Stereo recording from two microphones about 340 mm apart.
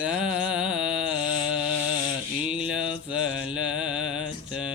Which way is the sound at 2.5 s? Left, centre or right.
Centre.